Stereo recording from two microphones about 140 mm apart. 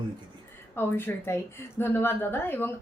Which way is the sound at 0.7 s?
15° left (ahead or behind).